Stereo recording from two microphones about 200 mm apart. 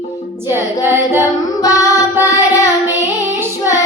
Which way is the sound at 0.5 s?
10° right (ahead or behind).